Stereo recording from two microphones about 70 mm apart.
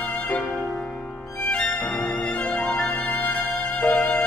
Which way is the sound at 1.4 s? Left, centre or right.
Left.